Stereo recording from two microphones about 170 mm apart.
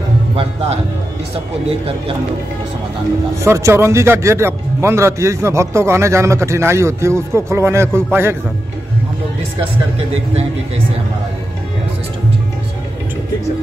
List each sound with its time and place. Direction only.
3.4 s speech: 15° right (ahead or behind)